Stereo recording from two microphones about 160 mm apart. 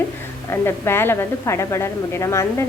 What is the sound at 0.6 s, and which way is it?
A woman's voice, 15° left (ahead or behind).